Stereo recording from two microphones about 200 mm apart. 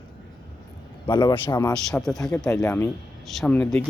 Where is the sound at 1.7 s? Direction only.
Centre (ahead or behind).